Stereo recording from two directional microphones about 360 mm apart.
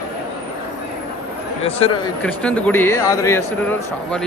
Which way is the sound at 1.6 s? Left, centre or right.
Centre.